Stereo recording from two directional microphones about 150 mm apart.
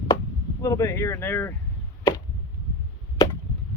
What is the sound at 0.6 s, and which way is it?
Speech, 20° left (ahead or behind).